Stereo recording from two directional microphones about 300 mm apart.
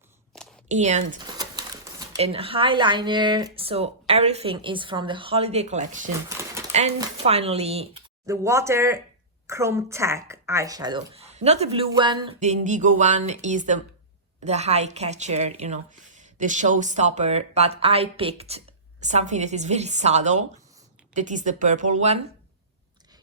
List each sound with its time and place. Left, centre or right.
0.7 s a woman's voice: right
1.4 s speech: centre
6.2 s a sound: centre
6.7 s a woman's voice: right
8.3 s a woman's voice: centre